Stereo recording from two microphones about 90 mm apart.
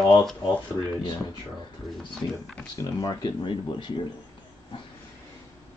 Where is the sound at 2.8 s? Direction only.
40° left (ahead or behind).